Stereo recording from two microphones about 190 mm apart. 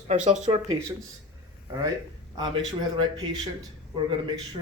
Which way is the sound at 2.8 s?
20° right (ahead or behind).